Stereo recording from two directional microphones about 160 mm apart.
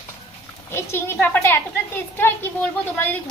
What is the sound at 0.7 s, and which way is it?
Speech, 15° left (ahead or behind).